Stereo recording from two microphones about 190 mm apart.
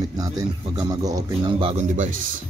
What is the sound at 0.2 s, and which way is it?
A man's voice, 20° right (ahead or behind).